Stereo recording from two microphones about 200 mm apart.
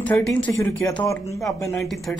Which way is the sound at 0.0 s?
5° left (ahead or behind).